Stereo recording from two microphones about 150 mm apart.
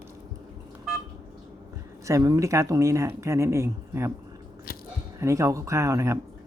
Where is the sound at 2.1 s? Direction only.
20° right (ahead or behind).